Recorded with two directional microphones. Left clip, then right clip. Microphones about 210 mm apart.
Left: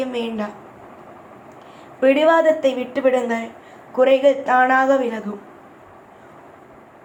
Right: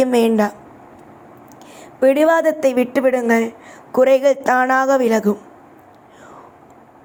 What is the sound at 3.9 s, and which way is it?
A woman's voice, 60° right (ahead or behind).